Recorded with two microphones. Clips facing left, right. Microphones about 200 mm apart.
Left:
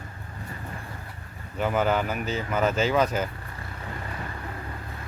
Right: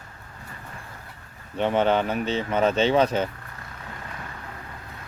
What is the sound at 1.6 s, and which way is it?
Speech, 30° right (ahead or behind).